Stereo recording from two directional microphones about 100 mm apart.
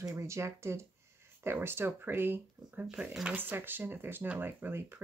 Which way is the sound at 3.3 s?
20° right (ahead or behind).